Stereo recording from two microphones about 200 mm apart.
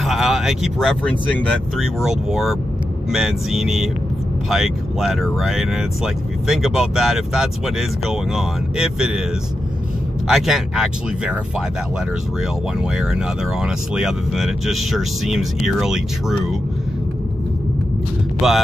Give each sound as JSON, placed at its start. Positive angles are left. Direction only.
{"t": 0.0, "sound": "speech", "side_deg": 0}
{"t": 10.2, "sound": "speech", "side_deg": 0}
{"t": 12.8, "sound": "speech", "side_deg": -5}
{"t": 18.4, "sound": "speech", "side_deg": 0}